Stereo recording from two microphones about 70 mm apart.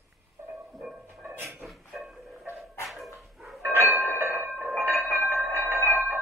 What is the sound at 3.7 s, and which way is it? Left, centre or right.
Train, right.